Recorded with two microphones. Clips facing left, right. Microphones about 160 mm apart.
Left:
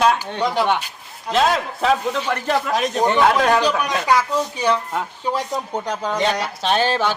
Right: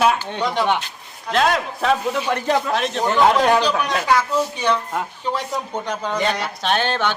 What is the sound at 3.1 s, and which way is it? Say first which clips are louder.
Speech: right 2 dB; centre (ahead or behind).